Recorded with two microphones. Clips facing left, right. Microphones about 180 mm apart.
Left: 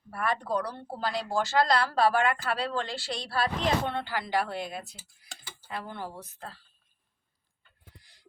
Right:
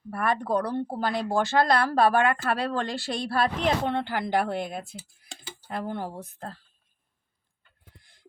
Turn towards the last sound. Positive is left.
turn(degrees=-50)  # may be behind; listen again after turning